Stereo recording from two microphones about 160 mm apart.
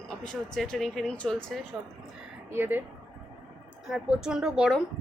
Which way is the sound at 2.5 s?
10° right (ahead or behind).